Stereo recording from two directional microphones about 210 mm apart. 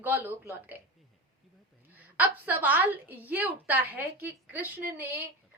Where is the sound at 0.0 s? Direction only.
10° right (ahead or behind).